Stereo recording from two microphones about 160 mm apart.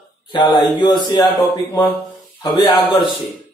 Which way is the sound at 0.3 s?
30° left (ahead or behind).